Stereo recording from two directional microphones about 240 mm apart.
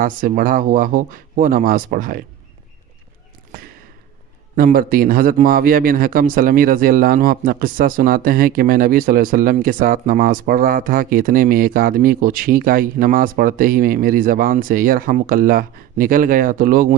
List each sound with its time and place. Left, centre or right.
0.0 s a man's voice: right
4.5 s a man's voice: right